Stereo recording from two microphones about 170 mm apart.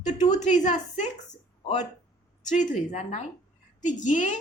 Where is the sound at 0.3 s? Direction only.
45° left (ahead or behind).